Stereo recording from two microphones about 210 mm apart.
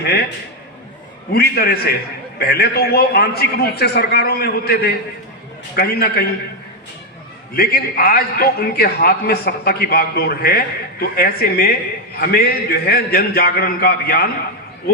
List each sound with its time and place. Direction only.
0.0 s a man's voice: 50° left (ahead or behind)
1.3 s a man's voice: 50° left (ahead or behind)
7.5 s a man's voice: 45° left (ahead or behind)